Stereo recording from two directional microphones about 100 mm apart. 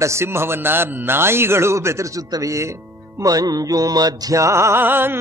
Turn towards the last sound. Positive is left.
turn(degrees=-20)  # may be behind; listen again after turning